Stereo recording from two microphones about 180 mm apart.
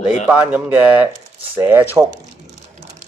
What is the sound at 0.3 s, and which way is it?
Speech, 10° right (ahead or behind).